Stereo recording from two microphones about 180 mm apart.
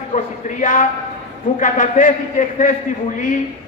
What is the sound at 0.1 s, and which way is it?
A man's voice, 45° left (ahead or behind).